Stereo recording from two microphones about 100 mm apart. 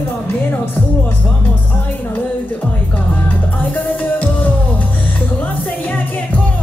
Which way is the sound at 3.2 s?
15° left (ahead or behind).